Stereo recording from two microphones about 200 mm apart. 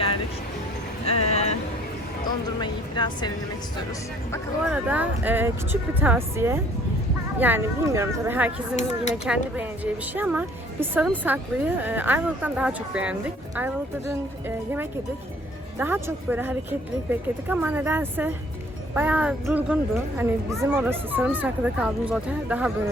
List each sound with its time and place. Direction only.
1.0 s vehicle: 30° left (ahead or behind)
2.6 s speech: 20° left (ahead or behind)
4.7 s speech: 10° right (ahead or behind)
8.7 s speech: 35° left (ahead or behind)
9.6 s speech: 10° right (ahead or behind)
14.4 s speech: 10° right (ahead or behind)